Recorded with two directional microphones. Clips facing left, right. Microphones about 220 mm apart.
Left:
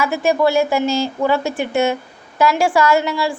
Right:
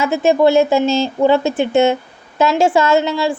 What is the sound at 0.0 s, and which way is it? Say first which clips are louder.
A woman's voice: right 3 dB; 25° right (ahead or behind).